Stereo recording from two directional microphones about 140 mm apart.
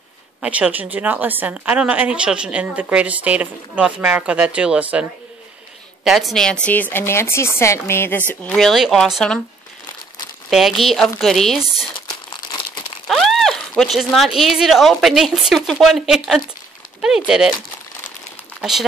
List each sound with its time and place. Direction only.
0.4 s a woman's voice: 10° right (ahead or behind)
6.0 s a woman's voice: centre (ahead or behind)
10.5 s a woman's voice: centre (ahead or behind)
12.1 s crumpling: 30° left (ahead or behind)
13.1 s a sound: centre (ahead or behind)
13.9 s a woman's voice: centre (ahead or behind)
18.6 s speech: centre (ahead or behind)